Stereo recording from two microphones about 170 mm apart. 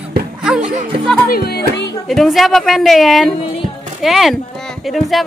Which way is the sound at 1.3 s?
70° left (ahead or behind).